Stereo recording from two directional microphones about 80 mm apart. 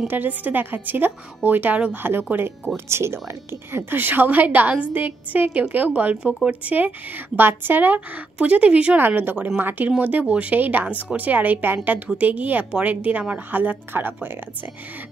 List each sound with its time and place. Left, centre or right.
0.1 s a woman's voice: right